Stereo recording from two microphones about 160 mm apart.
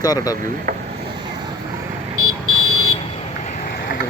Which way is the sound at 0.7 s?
55° right (ahead or behind).